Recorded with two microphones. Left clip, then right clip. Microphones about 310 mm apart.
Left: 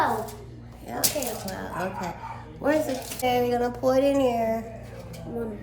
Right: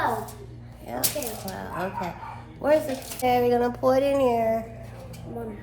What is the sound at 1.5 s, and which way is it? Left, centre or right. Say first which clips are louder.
Speech: even; centre.